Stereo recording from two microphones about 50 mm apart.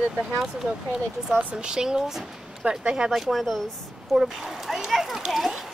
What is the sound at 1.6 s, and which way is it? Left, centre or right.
Speech, centre.